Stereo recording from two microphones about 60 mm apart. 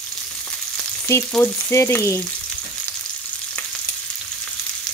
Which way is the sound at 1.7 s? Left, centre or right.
Left.